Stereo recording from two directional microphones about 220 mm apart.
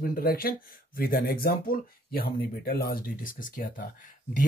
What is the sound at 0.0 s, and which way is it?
Speech, 40° left (ahead or behind).